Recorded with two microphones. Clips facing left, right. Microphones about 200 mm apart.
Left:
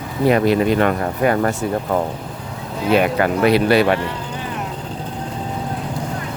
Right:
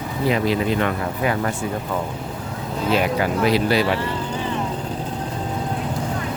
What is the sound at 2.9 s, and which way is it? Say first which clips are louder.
Speech: left 5 dB; 60° left (ahead or behind).